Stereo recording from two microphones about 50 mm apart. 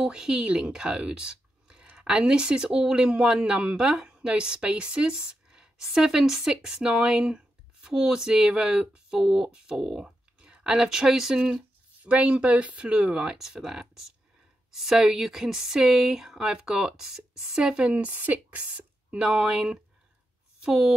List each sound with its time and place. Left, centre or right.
0.0 s speech: centre
17.9 s speech: right; by 19.8 s centre